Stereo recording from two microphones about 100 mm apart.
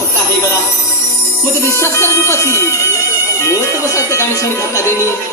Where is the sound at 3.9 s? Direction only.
30° left (ahead or behind).